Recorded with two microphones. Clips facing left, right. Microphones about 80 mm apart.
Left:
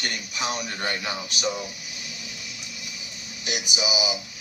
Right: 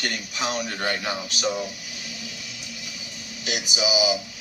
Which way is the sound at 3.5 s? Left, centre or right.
Right.